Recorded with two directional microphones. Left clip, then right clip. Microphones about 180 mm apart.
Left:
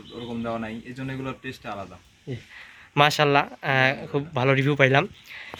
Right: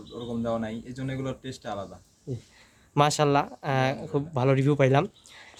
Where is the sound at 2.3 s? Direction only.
10° right (ahead or behind).